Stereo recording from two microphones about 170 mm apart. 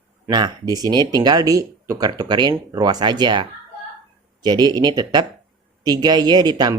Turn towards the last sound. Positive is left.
turn(degrees=-25)  # may be behind; listen again after turning